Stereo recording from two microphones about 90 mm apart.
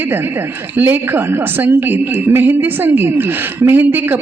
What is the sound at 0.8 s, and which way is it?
A woman's voice, 25° right (ahead or behind).